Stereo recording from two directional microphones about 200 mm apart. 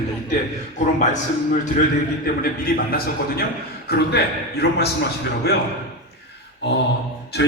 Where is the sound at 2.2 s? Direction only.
50° left (ahead or behind).